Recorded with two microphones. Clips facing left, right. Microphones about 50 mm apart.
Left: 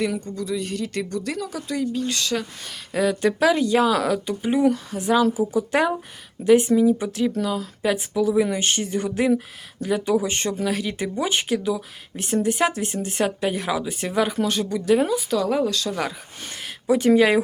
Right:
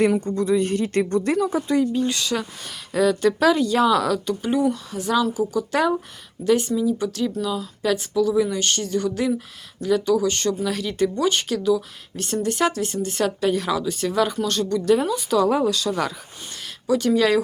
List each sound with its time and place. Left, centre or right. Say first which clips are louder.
0.3 s speech: right 7 dB; right
1.4 s speech: right 8 dB; right
1.7 s speech: right 1 dB; centre; by 10.5 s left
10.7 s speech: right 3 dB; centre
16.6 s a sound: left 1 dB; left
17.2 s speech: even; left